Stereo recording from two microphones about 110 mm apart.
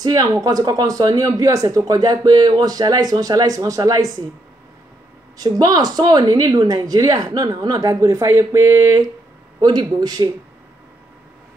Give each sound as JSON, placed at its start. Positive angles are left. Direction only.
{"t": 0.0, "sound": "speech", "side_deg": -35}
{"t": 5.4, "sound": "speech", "side_deg": -35}